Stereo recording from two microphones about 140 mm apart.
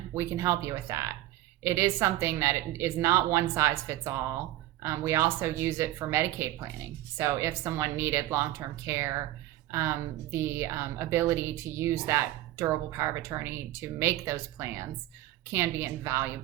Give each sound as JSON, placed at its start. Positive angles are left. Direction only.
{"t": 0.1, "sound": "a woman's voice", "side_deg": -20}
{"t": 10.3, "sound": "a woman's voice", "side_deg": -20}